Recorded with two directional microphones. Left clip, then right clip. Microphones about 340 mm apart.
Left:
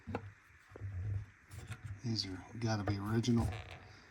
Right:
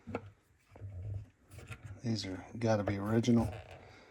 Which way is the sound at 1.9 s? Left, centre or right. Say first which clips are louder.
Right 1 dB; centre.